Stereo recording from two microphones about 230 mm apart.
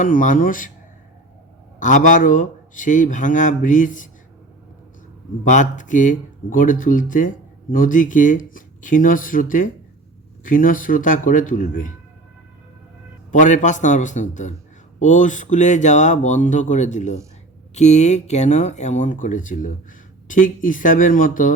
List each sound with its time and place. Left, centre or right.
0.0 s speech: left
1.8 s speech: left
5.5 s speech: left
13.3 s speech: left